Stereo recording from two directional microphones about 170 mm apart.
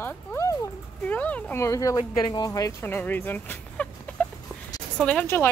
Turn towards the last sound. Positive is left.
turn(degrees=10)  # may be behind; listen again after turning